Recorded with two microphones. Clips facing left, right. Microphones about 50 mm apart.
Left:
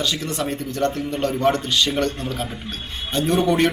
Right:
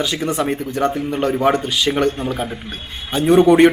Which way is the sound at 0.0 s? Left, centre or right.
Centre.